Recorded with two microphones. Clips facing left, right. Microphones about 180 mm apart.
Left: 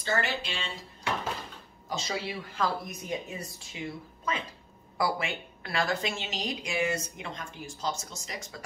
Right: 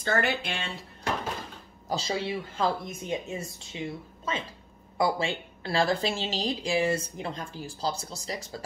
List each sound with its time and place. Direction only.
0.0 s speech: 55° right (ahead or behind)
1.9 s a woman's voice: 30° right (ahead or behind)